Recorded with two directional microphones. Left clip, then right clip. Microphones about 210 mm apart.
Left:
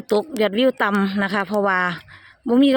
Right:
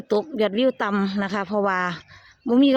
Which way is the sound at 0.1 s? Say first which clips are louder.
Left 2 dB; 5° left (ahead or behind).